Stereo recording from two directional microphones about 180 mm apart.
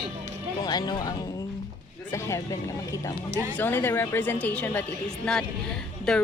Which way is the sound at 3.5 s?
10° left (ahead or behind).